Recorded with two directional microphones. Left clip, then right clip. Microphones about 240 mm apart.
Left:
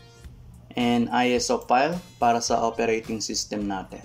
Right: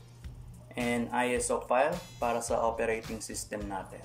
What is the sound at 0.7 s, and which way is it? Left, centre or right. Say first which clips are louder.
Speech: left 8 dB; left.